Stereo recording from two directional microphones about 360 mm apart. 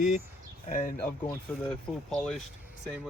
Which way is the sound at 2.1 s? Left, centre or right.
Centre.